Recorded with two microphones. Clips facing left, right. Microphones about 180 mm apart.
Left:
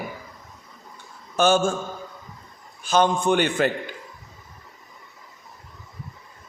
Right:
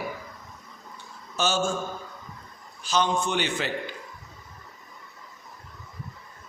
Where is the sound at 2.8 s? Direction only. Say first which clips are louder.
Left 6 dB; 55° left (ahead or behind).